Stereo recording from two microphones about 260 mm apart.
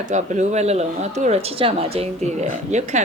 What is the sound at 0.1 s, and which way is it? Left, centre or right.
Speech, right.